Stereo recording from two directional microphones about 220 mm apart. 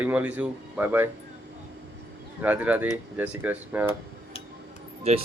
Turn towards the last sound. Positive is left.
turn(degrees=-30)  # may be behind; listen again after turning